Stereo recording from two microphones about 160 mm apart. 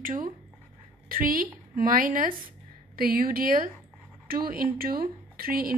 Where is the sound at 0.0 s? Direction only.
55° right (ahead or behind).